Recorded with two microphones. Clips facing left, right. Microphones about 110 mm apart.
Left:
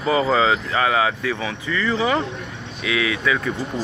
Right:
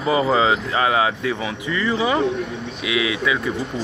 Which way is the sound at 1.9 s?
15° right (ahead or behind).